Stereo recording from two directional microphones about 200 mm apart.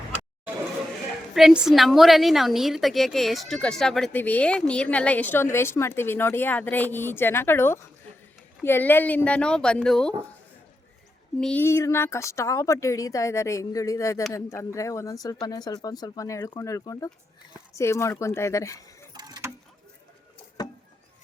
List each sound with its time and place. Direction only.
1.3 s a woman's voice: centre (ahead or behind)
11.3 s a woman's voice: 5° left (ahead or behind)
19.1 s mechanisms: 20° right (ahead or behind)